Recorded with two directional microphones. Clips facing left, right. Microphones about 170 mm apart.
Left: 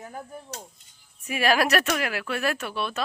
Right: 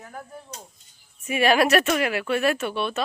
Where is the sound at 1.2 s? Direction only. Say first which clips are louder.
Right 3 dB; centre (ahead or behind).